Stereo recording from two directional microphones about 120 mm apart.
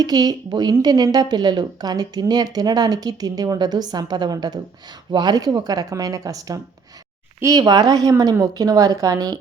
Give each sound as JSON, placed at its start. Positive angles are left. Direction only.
{"t": 0.0, "sound": "a woman's voice", "side_deg": -35}